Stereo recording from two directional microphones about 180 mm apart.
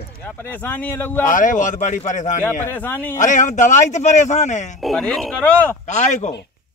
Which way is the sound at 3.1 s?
45° left (ahead or behind).